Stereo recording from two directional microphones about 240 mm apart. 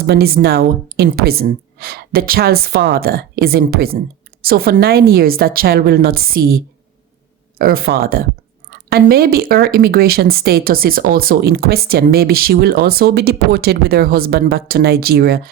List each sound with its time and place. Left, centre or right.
0.0 s speech: right
7.6 s speech: right